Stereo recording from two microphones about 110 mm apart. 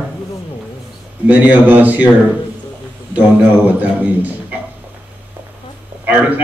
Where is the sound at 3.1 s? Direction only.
15° right (ahead or behind).